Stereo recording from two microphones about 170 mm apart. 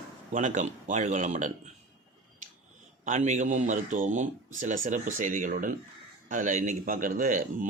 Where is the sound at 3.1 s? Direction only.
45° right (ahead or behind).